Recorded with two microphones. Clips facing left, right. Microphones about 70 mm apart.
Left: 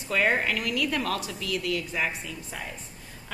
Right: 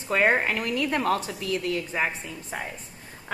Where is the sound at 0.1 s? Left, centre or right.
Right.